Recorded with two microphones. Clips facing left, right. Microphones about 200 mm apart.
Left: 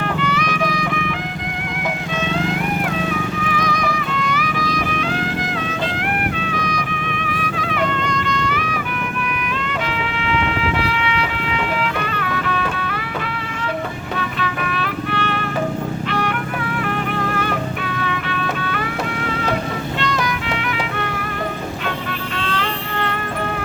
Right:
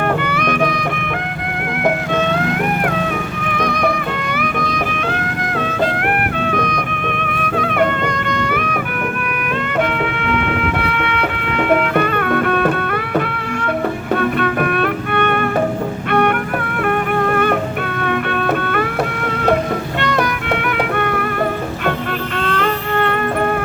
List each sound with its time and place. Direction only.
0.2 s music: 55° right (ahead or behind)
6.4 s music: 55° right (ahead or behind)
10.2 s music: 55° right (ahead or behind)
14.2 s music: 55° right (ahead or behind)
20.0 s music: 55° right (ahead or behind)
22.4 s insect: 55° right (ahead or behind)